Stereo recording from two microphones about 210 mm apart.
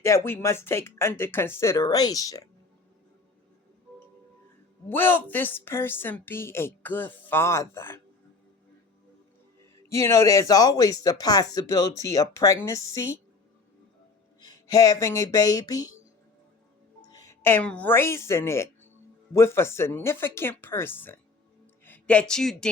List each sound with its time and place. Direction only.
0.0 s a woman's voice: 15° left (ahead or behind)
4.9 s a woman's voice: 10° left (ahead or behind)
9.9 s a woman's voice: 15° left (ahead or behind)
14.4 s speech: 15° left (ahead or behind)
17.0 s a woman's voice: 15° left (ahead or behind)